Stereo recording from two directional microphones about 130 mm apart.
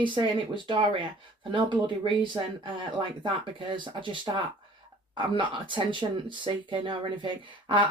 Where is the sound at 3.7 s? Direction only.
40° right (ahead or behind).